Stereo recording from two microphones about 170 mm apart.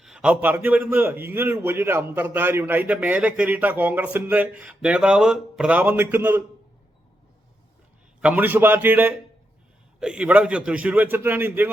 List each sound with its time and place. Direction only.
0.0 s a man's voice: 5° right (ahead or behind)
8.2 s a man's voice: 10° right (ahead or behind)